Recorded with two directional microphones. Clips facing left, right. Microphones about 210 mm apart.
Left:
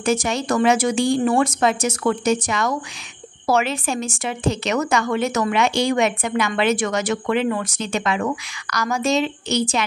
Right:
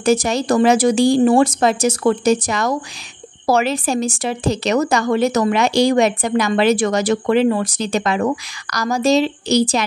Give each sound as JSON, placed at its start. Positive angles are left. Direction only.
{"t": 0.0, "sound": "a woman's voice", "side_deg": -35}